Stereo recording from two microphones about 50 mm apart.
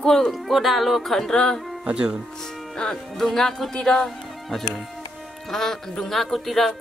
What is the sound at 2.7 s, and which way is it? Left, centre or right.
Speech, centre.